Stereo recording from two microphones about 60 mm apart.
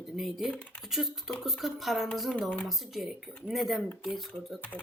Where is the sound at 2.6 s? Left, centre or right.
Centre.